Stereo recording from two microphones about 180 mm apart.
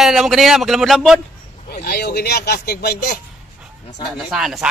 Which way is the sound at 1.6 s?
55° left (ahead or behind).